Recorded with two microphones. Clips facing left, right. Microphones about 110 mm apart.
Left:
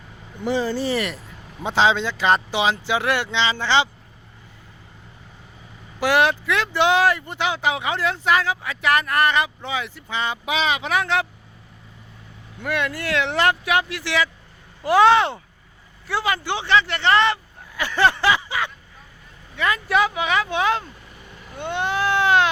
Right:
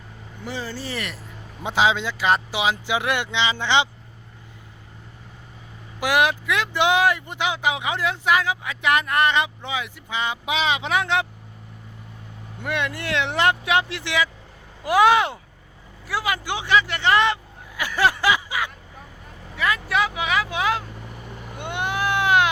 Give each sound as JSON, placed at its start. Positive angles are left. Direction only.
{"t": 0.4, "sound": "speech", "side_deg": 25}
{"t": 0.9, "sound": "speech", "side_deg": 5}
{"t": 1.6, "sound": "speech", "side_deg": -10}
{"t": 6.0, "sound": "speech", "side_deg": -15}
{"t": 12.6, "sound": "speech", "side_deg": -20}
{"t": 19.5, "sound": "speech", "side_deg": 0}
{"t": 21.6, "sound": "baby cry", "side_deg": -15}